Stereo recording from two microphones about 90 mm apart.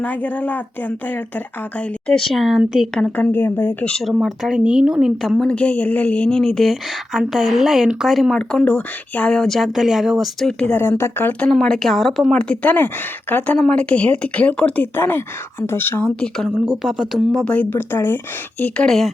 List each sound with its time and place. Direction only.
0.0 s speech: 20° left (ahead or behind)
2.0 s speech: 5° left (ahead or behind)
3.0 s speech: 20° left (ahead or behind)
4.2 s speech: 5° right (ahead or behind)
5.5 s speech: 15° left (ahead or behind)
8.6 s speech: 15° left (ahead or behind); by 10.5 s 5° right (ahead or behind)
10.6 s speech: 20° left (ahead or behind)
11.3 s speech: 10° left (ahead or behind)
16.8 s speech: 5° right (ahead or behind)
17.4 s speech: 15° left (ahead or behind)
18.9 s speech: centre (ahead or behind)